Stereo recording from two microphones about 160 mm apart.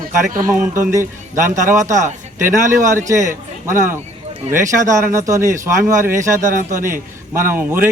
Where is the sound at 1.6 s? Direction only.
50° right (ahead or behind).